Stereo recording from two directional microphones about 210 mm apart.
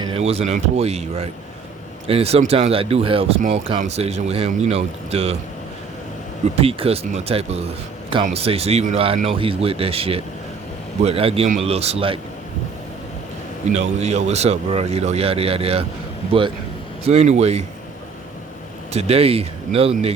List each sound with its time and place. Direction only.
0.0 s speech: 25° right (ahead or behind)
6.6 s speech: 30° right (ahead or behind)
13.7 s speech: 30° right (ahead or behind)
17.0 s speech: 30° right (ahead or behind)
18.9 s speech: 30° right (ahead or behind)